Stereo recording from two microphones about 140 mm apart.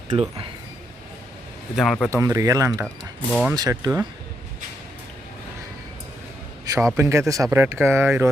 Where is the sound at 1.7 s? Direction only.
Centre (ahead or behind).